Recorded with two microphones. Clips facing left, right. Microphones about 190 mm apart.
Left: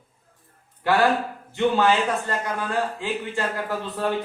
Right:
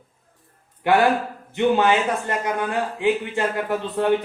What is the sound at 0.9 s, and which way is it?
A man's voice, 20° right (ahead or behind).